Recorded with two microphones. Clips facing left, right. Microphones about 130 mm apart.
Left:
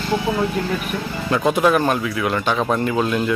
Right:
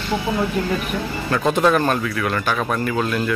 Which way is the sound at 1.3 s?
15° left (ahead or behind).